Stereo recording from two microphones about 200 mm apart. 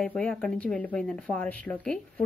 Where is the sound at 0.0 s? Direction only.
5° left (ahead or behind).